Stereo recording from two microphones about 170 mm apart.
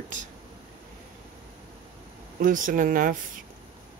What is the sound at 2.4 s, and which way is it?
Speech, 50° right (ahead or behind).